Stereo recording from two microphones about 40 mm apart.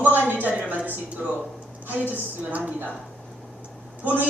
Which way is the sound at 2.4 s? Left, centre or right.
Right.